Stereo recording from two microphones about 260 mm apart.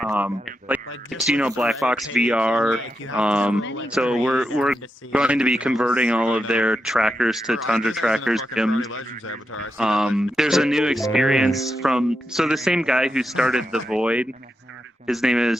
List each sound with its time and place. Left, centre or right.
0.0 s speech: centre
3.6 s speech: left
3.9 s speech: centre
8.9 s speech: left
9.7 s speech: centre